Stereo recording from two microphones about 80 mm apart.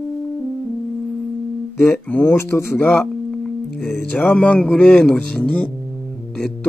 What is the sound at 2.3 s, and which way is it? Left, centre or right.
Speech, left.